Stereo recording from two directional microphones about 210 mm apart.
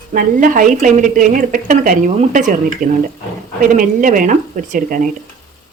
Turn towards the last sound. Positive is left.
turn(degrees=-40)  # may be behind; listen again after turning